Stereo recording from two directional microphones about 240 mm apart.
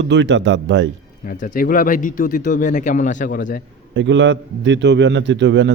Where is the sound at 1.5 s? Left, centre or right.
Left.